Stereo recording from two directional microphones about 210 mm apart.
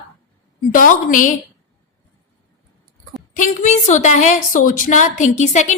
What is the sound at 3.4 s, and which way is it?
A woman's voice, 35° left (ahead or behind).